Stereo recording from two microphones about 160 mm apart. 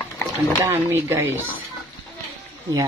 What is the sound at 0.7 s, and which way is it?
Speech, 15° right (ahead or behind).